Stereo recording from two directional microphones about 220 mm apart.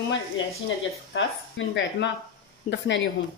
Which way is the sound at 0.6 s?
65° left (ahead or behind).